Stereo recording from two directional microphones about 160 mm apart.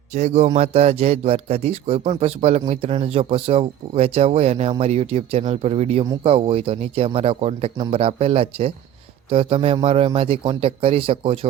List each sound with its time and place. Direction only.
0.1 s a man's voice: 45° right (ahead or behind)